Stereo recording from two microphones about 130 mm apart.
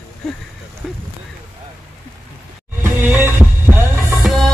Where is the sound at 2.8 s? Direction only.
20° right (ahead or behind).